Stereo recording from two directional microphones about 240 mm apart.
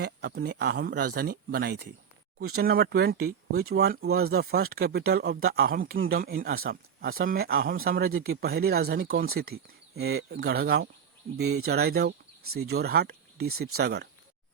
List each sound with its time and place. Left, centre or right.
0.0 s speech: right
3.5 s speech: right
3.8 s speech: right
13.5 s speech: right
13.7 s speech: right